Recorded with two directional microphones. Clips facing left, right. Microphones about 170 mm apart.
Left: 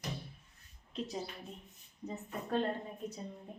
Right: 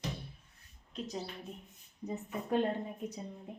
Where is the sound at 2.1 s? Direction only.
15° right (ahead or behind).